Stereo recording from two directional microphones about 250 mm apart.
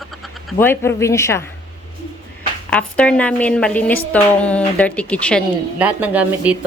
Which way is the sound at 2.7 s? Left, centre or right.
Centre.